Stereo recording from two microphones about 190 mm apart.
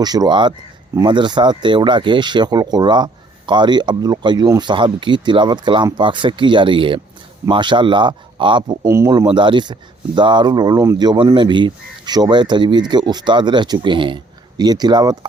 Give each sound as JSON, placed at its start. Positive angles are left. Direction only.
{"t": 0.0, "sound": "speech", "side_deg": -20}